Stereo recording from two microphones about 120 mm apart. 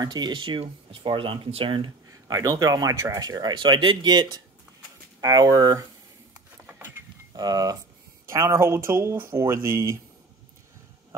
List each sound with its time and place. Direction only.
0.0 s speech: 35° right (ahead or behind)
2.2 s speech: 30° right (ahead or behind)
6.6 s a sound: 15° right (ahead or behind)
7.3 s speech: 30° right (ahead or behind)